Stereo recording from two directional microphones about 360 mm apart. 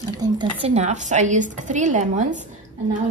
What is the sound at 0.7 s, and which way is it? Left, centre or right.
A woman's voice, centre.